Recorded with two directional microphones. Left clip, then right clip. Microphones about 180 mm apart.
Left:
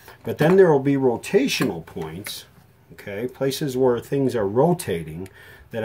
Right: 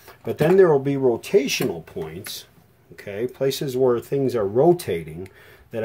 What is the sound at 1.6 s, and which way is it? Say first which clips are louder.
Speech: even; 30° right (ahead or behind).